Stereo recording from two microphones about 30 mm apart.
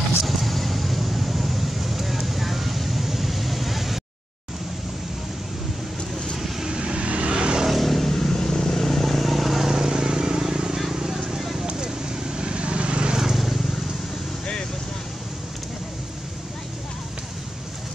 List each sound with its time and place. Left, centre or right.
0.2 s vehicle: centre
6.7 s vehicle: right
7.0 s vehicle: right
7.6 s vehicle: centre
9.8 s vehicle: right
12.4 s vehicle: right
13.2 s vehicle: centre